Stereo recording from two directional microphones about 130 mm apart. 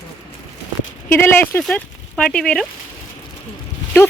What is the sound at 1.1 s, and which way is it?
Speech, 15° left (ahead or behind).